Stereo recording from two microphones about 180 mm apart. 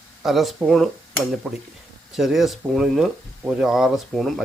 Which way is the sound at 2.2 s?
Centre (ahead or behind).